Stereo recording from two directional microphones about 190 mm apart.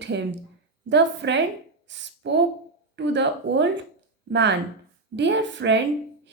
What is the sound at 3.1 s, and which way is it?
Speech, 70° right (ahead or behind).